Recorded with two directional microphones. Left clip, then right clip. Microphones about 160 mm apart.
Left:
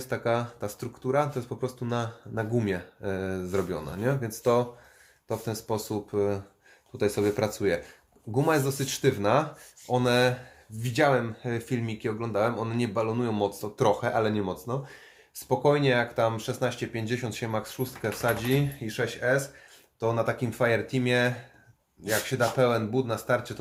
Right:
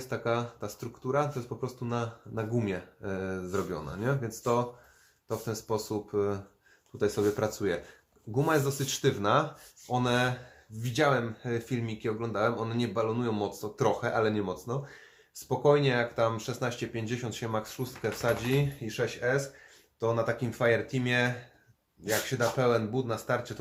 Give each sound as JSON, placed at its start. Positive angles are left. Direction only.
{"t": 0.0, "sound": "speech", "side_deg": 30}